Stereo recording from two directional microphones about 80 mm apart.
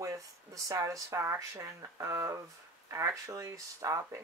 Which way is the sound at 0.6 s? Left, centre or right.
Right.